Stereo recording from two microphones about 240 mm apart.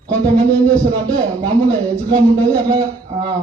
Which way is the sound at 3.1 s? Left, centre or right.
Centre.